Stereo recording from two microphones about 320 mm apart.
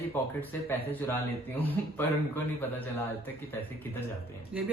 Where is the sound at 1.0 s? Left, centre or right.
Centre.